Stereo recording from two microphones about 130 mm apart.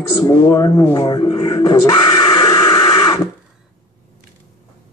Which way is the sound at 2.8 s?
35° left (ahead or behind).